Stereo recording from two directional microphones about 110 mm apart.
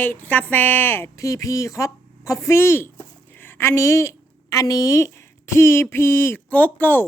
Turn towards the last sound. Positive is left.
turn(degrees=15)  # may be behind; listen again after turning